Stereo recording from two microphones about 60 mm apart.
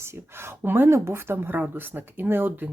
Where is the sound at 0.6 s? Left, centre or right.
Right.